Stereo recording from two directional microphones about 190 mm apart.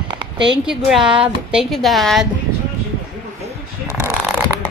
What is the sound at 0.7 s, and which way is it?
A woman's voice, 5° right (ahead or behind).